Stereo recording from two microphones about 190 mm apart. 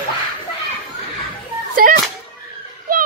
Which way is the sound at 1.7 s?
50° right (ahead or behind).